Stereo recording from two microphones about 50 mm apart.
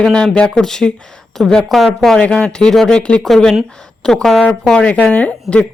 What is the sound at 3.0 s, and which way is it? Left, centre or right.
Speech, left.